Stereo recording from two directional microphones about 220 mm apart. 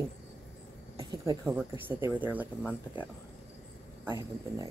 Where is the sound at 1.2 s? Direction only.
10° right (ahead or behind).